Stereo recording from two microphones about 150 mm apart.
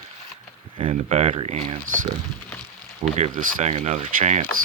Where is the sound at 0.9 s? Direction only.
50° right (ahead or behind).